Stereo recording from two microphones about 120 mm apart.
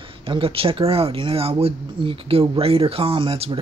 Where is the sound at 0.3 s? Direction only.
50° right (ahead or behind).